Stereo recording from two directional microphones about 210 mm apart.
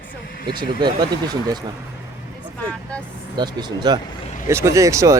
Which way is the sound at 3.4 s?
20° right (ahead or behind).